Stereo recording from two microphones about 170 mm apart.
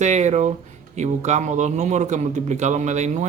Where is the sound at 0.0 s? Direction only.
45° right (ahead or behind).